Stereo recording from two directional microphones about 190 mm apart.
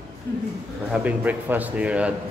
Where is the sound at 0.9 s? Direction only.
10° right (ahead or behind).